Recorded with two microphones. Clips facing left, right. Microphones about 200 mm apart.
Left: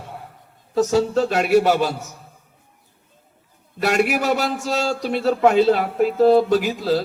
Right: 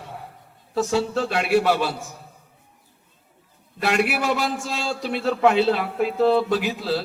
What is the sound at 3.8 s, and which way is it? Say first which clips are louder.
A man's voice: left 3 dB; 45° left (ahead or behind).